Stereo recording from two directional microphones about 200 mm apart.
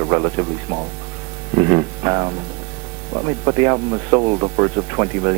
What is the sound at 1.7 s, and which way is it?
Music, 20° right (ahead or behind).